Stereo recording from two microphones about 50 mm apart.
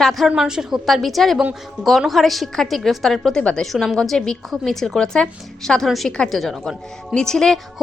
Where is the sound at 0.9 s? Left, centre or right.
Centre.